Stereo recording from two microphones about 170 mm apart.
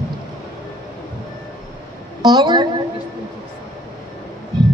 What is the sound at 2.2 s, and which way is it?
Speech, 25° right (ahead or behind).